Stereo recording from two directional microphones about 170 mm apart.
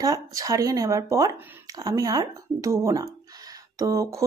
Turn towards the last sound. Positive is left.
turn(degrees=-20)  # may be behind; listen again after turning